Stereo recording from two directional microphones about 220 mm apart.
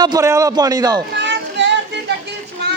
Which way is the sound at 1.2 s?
50° right (ahead or behind).